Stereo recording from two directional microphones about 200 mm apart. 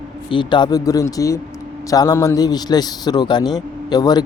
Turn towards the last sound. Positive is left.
turn(degrees=20)  # may be behind; listen again after turning